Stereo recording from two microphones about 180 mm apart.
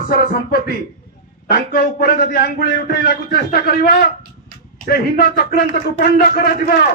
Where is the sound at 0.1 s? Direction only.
55° left (ahead or behind).